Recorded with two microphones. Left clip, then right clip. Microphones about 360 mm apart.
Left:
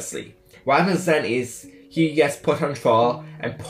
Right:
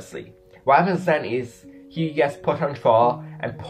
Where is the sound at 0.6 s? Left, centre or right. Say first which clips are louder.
Right 2 dB; right.